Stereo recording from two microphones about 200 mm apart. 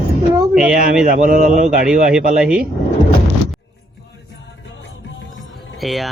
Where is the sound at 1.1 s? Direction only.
40° right (ahead or behind).